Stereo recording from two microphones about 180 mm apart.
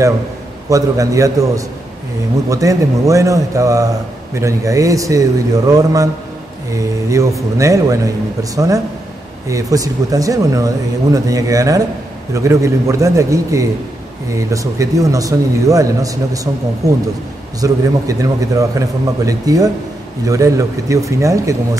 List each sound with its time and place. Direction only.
0.7 s a man's voice: 20° right (ahead or behind)
17.6 s a man's voice: 20° right (ahead or behind)